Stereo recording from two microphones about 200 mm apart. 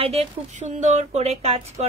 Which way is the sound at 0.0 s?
30° right (ahead or behind).